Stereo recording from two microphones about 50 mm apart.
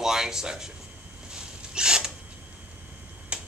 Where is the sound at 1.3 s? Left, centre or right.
Centre.